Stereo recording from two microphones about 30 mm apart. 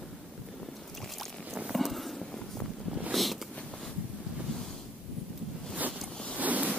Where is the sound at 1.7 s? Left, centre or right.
Centre.